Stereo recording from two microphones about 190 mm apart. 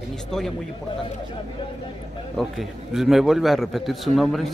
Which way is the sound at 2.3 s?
Centre (ahead or behind).